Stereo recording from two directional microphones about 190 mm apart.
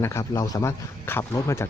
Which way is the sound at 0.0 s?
15° left (ahead or behind).